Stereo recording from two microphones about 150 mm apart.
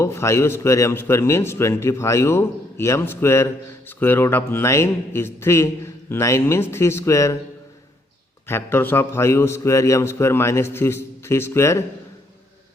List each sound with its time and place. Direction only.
0.0 s a man's voice: 20° left (ahead or behind)
8.4 s a man's voice: 15° left (ahead or behind)